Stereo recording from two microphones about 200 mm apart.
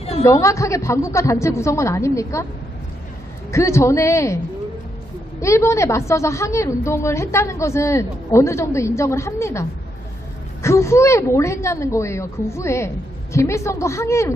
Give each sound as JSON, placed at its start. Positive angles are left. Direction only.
{"t": 0.0, "sound": "a sound", "side_deg": 30}
{"t": 0.3, "sound": "a woman's voice", "side_deg": 15}
{"t": 3.5, "sound": "a woman's voice", "side_deg": 15}
{"t": 5.4, "sound": "a woman's voice", "side_deg": 15}